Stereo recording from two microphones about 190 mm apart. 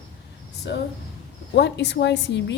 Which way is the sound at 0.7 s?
65° left (ahead or behind).